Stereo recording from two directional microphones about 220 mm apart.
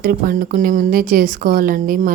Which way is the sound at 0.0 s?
40° right (ahead or behind).